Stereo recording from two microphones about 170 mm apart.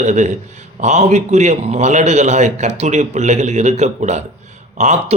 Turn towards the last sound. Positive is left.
turn(degrees=-45)  # may be behind; listen again after turning